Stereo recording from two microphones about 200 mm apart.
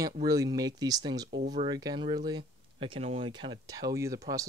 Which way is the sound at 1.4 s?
35° right (ahead or behind).